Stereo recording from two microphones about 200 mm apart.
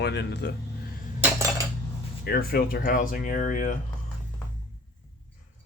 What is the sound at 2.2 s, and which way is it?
Speech, 50° left (ahead or behind).